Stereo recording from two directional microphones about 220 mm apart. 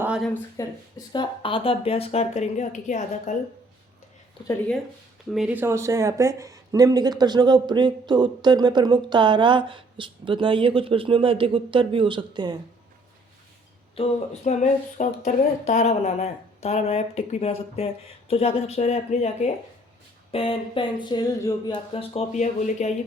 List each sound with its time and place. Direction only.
0.0 s a sound: 5° right (ahead or behind)
0.5 s speech: 15° left (ahead or behind); by 3.3 s 35° left (ahead or behind)
5.3 s speech: 5° right (ahead or behind); by 12.5 s 20° right (ahead or behind)
13.9 s speech: 30° left (ahead or behind)